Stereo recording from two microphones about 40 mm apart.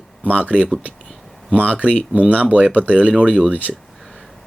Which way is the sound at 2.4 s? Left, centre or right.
Right.